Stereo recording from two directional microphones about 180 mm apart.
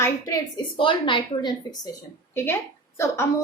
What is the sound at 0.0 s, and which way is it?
A woman's voice, 20° left (ahead or behind).